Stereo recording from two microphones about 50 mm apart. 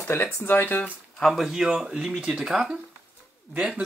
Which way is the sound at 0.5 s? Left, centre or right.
Left.